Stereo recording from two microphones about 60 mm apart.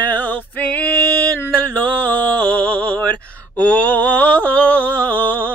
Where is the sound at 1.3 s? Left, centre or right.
Left.